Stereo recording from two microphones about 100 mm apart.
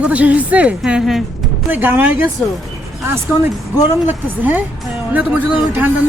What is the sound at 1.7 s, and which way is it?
Speech, 20° right (ahead or behind).